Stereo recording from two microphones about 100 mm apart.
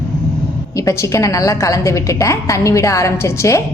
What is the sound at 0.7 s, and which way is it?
A woman's voice, 30° left (ahead or behind).